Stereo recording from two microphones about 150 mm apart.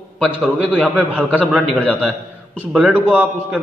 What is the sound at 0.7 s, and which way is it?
Speech, 5° left (ahead or behind).